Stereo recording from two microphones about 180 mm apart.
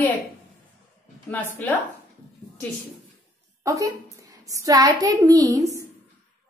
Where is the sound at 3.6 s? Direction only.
15° right (ahead or behind).